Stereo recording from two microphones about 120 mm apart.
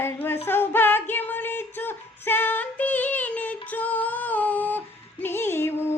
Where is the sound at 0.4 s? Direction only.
20° left (ahead or behind).